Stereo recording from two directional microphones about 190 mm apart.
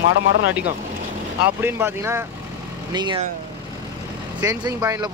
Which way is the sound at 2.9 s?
25° right (ahead or behind).